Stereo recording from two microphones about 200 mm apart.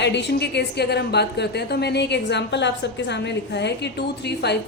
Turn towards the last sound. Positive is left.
turn(degrees=55)  # may be behind; listen again after turning